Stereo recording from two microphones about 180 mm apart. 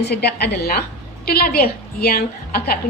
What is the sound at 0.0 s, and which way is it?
A woman's voice, 65° left (ahead or behind).